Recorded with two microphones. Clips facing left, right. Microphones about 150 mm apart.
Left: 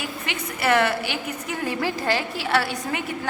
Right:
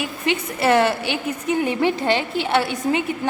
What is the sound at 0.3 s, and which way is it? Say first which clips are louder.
A woman's voice: right 5 dB; 30° right (ahead or behind).